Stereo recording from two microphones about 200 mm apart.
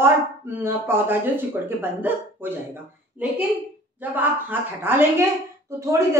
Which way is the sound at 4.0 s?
10° right (ahead or behind).